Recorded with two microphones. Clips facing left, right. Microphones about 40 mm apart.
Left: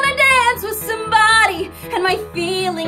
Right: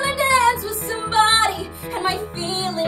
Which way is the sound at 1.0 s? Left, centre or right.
Left.